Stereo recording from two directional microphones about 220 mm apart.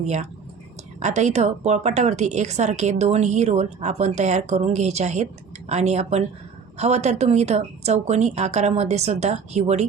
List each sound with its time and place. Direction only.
0.0 s a woman's voice: 30° right (ahead or behind)